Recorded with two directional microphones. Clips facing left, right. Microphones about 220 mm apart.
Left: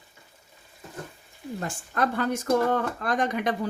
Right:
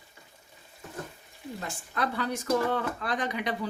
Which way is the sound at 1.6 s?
50° left (ahead or behind).